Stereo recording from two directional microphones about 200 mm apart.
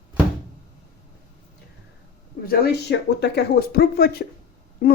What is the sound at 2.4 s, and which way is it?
Speech, 55° left (ahead or behind).